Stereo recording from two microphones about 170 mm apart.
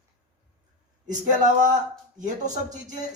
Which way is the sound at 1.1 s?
50° right (ahead or behind).